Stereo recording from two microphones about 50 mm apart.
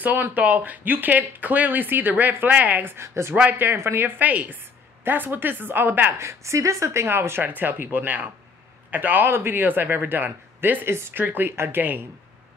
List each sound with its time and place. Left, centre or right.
0.0 s speech: right
2.8 s speech: right
4.3 s speech: right
5.0 s speech: right
6.1 s speech: right
10.9 s speech: right
11.5 s speech: right